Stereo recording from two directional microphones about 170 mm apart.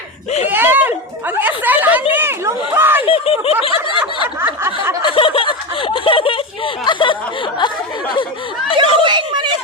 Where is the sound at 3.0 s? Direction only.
35° left (ahead or behind).